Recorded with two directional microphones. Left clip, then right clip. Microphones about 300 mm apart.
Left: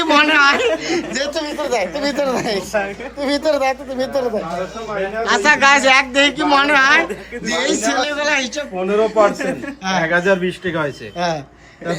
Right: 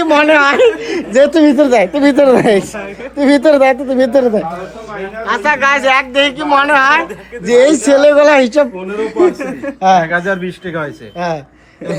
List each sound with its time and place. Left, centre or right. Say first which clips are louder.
0.0 s speech: right 4 dB; centre
1.3 s speech: right 11 dB; right
5.2 s speech: right 1 dB; centre; by 9.3 s right
9.4 s speech: right 7 dB; centre